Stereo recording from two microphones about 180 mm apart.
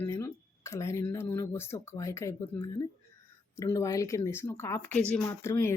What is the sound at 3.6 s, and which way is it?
Speech, 20° left (ahead or behind).